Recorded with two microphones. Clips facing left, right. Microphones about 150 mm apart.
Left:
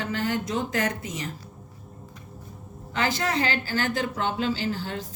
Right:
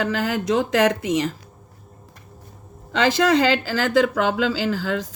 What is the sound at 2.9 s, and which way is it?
A woman's voice, 90° right.